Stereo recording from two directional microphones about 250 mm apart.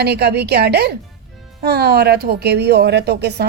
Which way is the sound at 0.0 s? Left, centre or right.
Right.